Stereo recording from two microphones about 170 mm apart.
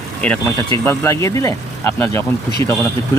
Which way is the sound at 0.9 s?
15° left (ahead or behind).